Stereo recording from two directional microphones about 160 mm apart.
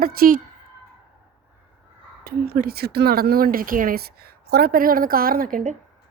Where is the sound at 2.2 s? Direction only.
75° right (ahead or behind).